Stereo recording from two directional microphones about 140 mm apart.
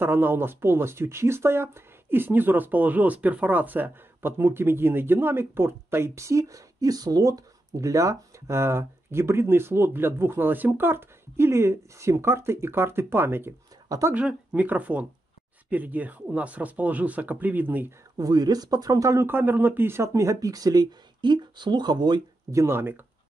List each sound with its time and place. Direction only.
0.0 s speech: 15° right (ahead or behind)
14.1 s speech: 10° right (ahead or behind)
18.1 s speech: 25° right (ahead or behind)